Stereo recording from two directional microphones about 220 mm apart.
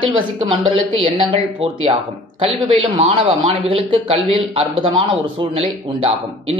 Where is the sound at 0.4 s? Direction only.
20° right (ahead or behind).